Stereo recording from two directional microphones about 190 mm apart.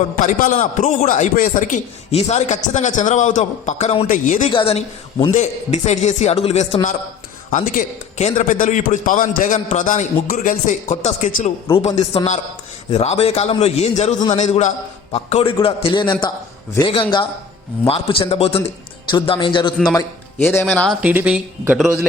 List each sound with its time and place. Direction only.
0.2 s speech: 40° left (ahead or behind)
4.5 s a man's voice: 30° left (ahead or behind)
7.5 s a man's voice: 45° left (ahead or behind); by 21.0 s 5° left (ahead or behind)
21.0 s speech: 10° right (ahead or behind)